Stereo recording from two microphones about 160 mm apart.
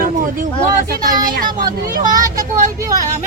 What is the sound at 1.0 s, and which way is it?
Speech, 60° right (ahead or behind).